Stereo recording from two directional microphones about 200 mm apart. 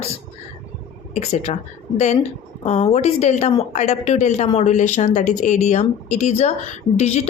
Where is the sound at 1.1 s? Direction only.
35° left (ahead or behind).